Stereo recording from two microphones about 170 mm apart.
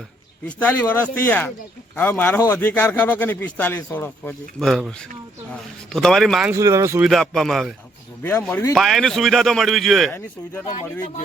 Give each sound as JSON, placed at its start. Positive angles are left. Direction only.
{"t": 0.4, "sound": "a man's voice", "side_deg": 10}
{"t": 6.5, "sound": "speech", "side_deg": -15}
{"t": 7.0, "sound": "speech", "side_deg": 0}
{"t": 8.2, "sound": "a man's voice", "side_deg": 15}
{"t": 8.7, "sound": "speech", "side_deg": 0}
{"t": 10.2, "sound": "a man's voice", "side_deg": 10}